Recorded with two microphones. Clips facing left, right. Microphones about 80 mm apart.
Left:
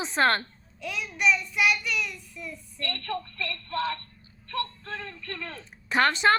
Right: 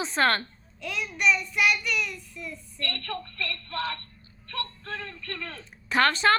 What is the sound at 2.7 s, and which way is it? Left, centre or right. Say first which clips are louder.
Speech: left 2 dB; left.